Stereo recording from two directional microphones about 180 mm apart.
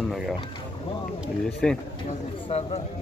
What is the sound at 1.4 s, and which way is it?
Speech, 5° left (ahead or behind).